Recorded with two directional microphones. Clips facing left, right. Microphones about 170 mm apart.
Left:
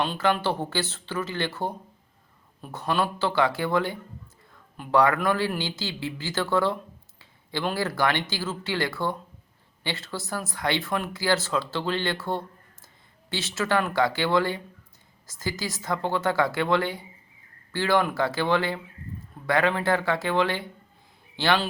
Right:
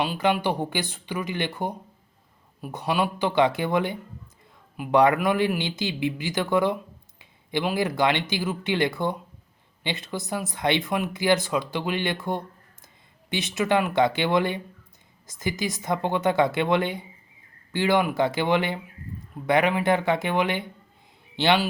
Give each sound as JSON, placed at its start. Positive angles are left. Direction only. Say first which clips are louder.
{"t": 0.0, "sound": "a man's voice", "louder": "right 1 dB", "side_deg": -15}